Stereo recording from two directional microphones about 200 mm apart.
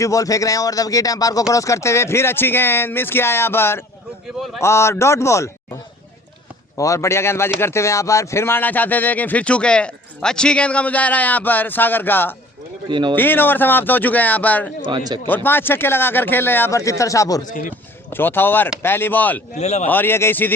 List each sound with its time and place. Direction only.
0.0 s speech: 15° left (ahead or behind)
6.7 s speech: 15° left (ahead or behind)
12.9 s a man's voice: 20° right (ahead or behind)
13.1 s speech: 10° left (ahead or behind)
14.8 s a man's voice: 20° right (ahead or behind)
15.3 s speech: 10° left (ahead or behind)
19.5 s a man's voice: 35° left (ahead or behind)
19.9 s speech: 10° left (ahead or behind)